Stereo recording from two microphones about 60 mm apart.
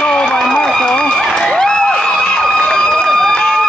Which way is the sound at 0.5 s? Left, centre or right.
Centre.